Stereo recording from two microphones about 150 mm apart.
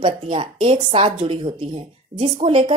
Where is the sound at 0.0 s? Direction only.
35° right (ahead or behind).